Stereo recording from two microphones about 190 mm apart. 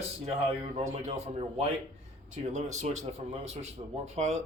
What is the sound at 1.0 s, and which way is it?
A man's voice, 35° right (ahead or behind).